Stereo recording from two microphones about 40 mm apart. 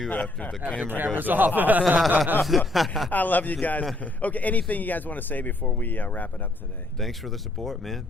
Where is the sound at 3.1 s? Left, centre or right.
Left.